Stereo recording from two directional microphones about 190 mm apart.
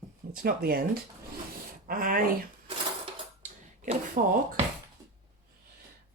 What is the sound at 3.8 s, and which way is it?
Speech, 35° right (ahead or behind).